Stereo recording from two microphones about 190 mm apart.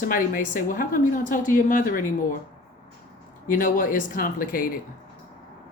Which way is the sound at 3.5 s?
45° left (ahead or behind).